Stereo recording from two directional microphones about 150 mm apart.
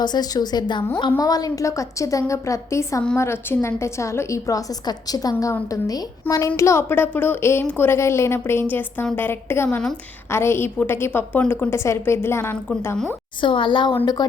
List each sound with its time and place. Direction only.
0.0 s a woman's voice: 30° left (ahead or behind)
9.6 s a woman's voice: 5° left (ahead or behind)
10.3 s a woman's voice: 15° left (ahead or behind)
13.4 s a woman's voice: 35° left (ahead or behind)